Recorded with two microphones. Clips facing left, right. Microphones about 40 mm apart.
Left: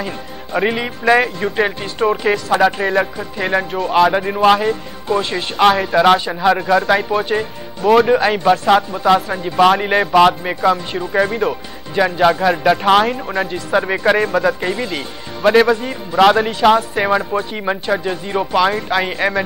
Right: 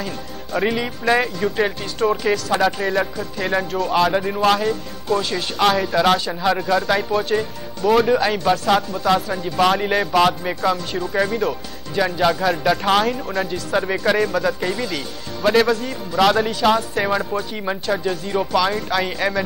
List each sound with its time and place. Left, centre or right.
0.0 s a man's voice: centre